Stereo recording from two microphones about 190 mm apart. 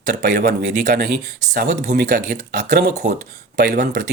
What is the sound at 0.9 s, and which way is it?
Speech, 60° right (ahead or behind).